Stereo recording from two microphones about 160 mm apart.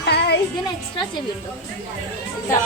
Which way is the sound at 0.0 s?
90° left.